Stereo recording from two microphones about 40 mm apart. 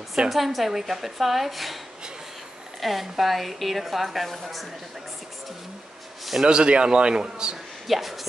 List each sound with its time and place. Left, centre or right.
0.3 s a woman's voice: centre
2.8 s a woman's voice: centre
6.4 s a man's voice: right
7.9 s a woman's voice: centre